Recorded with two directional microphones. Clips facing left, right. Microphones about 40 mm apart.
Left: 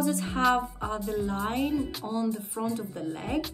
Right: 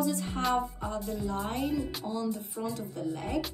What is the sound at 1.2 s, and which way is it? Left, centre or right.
Music, left.